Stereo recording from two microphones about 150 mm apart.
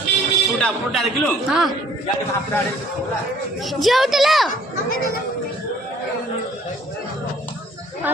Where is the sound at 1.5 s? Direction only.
5° right (ahead or behind).